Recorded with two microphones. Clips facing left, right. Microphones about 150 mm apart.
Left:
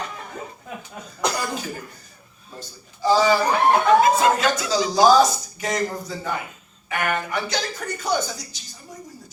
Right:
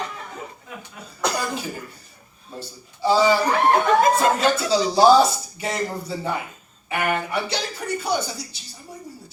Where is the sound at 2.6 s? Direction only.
30° right (ahead or behind).